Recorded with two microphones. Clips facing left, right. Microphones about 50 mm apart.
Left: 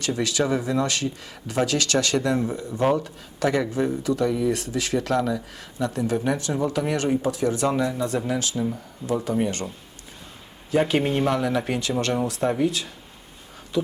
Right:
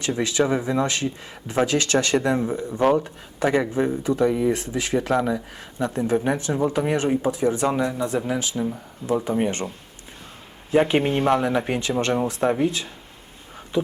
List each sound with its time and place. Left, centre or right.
0.0 s speech: right